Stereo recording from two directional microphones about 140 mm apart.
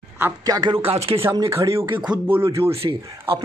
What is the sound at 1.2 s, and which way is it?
Speech, 20° right (ahead or behind).